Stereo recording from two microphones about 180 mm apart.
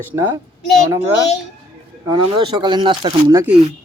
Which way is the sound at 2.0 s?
25° right (ahead or behind).